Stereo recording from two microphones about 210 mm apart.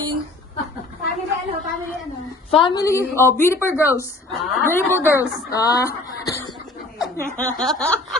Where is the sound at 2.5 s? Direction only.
25° left (ahead or behind).